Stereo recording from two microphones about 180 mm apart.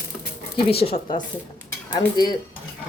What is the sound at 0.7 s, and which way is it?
A woman's voice, 35° left (ahead or behind).